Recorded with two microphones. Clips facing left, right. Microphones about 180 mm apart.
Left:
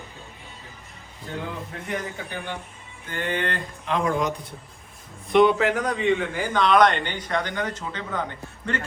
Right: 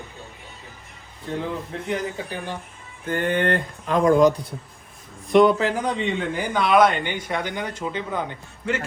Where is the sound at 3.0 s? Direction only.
50° right (ahead or behind).